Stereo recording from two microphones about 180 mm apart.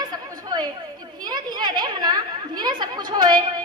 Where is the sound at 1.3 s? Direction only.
25° right (ahead or behind).